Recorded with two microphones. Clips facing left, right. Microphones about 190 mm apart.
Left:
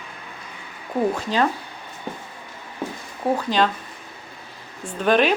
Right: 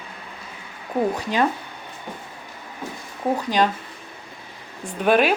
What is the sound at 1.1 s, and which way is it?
Speech, 15° right (ahead or behind).